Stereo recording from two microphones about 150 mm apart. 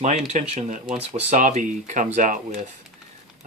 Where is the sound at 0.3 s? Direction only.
55° right (ahead or behind).